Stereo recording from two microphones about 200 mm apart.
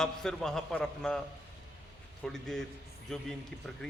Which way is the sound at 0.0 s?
5° left (ahead or behind).